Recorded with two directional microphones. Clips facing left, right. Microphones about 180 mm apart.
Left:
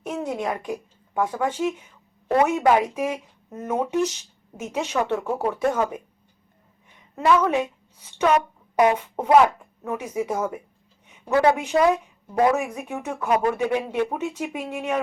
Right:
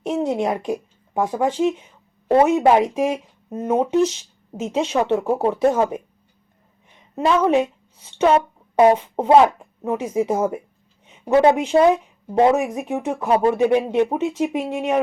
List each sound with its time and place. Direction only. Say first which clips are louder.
0.0 s speech: right 6 dB; 25° right (ahead or behind)
7.2 s a woman's voice: right 3 dB; 25° right (ahead or behind)